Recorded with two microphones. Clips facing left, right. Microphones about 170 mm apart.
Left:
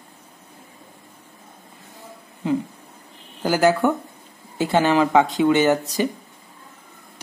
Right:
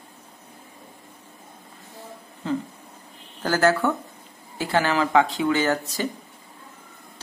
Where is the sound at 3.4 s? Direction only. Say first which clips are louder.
Left 3 dB; 15° left (ahead or behind).